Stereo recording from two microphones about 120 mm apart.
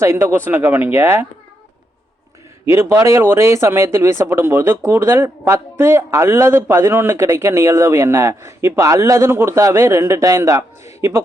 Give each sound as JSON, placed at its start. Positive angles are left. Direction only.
{"t": 0.0, "sound": "speech", "side_deg": -20}
{"t": 2.6, "sound": "speech", "side_deg": -20}